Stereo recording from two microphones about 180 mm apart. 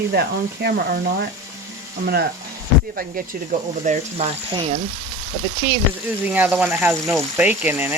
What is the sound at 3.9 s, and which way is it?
Speech, 45° right (ahead or behind).